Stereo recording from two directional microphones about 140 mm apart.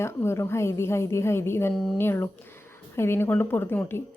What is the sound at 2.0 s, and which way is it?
A woman's voice, 15° left (ahead or behind).